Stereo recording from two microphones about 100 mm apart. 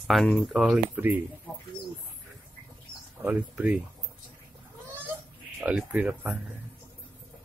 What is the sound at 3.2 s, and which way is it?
Speech, 15° right (ahead or behind).